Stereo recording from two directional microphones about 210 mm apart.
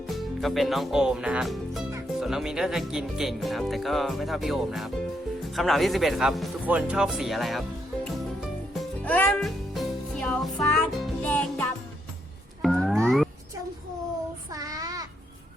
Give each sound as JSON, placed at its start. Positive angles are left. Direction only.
{"t": 0.4, "sound": "speech", "side_deg": 0}
{"t": 8.0, "sound": "music", "side_deg": 0}
{"t": 14.5, "sound": "child singing", "side_deg": -15}